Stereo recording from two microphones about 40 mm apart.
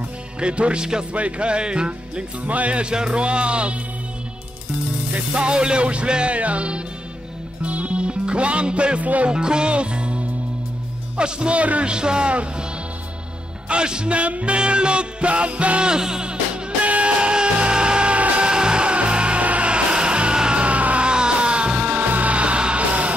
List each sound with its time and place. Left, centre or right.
0.4 s music: right
2.4 s music: right
5.3 s music: right
9.3 s music: right
11.9 s music: right
13.7 s music: right
15.9 s music: centre
18.5 s music: right
20.6 s music: right
21.1 s music: right
21.9 s music: right